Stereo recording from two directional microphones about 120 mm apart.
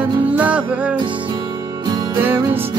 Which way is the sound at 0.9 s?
45° right (ahead or behind).